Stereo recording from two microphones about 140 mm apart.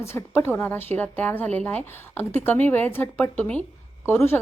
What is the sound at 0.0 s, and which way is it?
A woman's voice, 20° left (ahead or behind).